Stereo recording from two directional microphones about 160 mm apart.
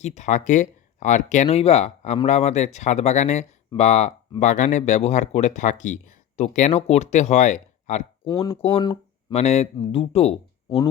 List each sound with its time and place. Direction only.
0.0 s speech: 45° left (ahead or behind)
8.4 s speech: 35° left (ahead or behind)
9.4 s speech: 45° left (ahead or behind)